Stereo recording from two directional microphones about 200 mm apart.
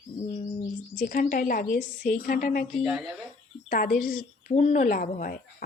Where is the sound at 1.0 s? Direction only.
45° left (ahead or behind).